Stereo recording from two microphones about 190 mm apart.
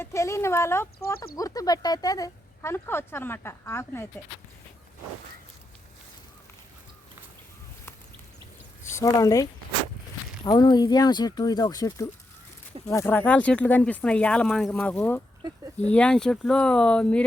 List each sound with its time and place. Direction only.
0.0 s speech: 15° left (ahead or behind)
8.8 s speech: 15° left (ahead or behind)